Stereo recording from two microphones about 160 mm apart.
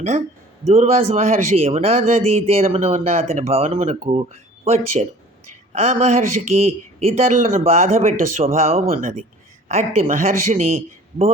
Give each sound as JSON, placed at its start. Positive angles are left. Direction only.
{"t": 0.7, "sound": "speech", "side_deg": -45}